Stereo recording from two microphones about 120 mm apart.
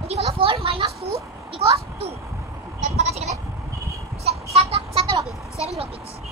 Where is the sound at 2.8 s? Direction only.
65° right (ahead or behind).